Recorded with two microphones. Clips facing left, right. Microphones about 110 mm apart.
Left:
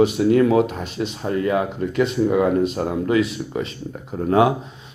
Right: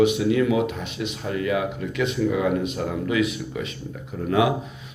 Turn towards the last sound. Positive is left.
turn(degrees=35)  # may be behind; listen again after turning